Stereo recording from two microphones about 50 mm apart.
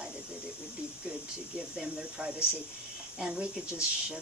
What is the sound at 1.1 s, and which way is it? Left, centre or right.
Speech, centre.